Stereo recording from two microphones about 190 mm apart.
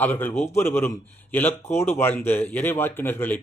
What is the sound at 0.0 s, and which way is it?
Speech, 10° left (ahead or behind).